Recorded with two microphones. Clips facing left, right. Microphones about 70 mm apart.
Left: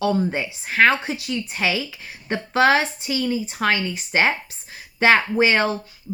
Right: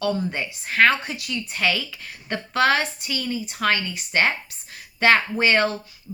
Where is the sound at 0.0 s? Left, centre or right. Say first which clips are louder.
Left 3 dB; left.